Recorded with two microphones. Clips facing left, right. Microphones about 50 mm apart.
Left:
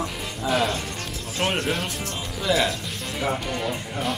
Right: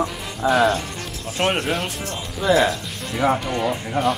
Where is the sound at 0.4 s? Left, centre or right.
Centre.